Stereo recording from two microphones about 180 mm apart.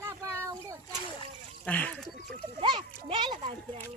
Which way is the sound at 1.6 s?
10° left (ahead or behind).